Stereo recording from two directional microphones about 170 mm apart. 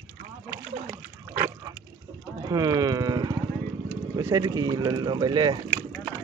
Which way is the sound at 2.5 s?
25° right (ahead or behind).